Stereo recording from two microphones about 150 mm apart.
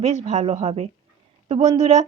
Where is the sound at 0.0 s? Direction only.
50° right (ahead or behind).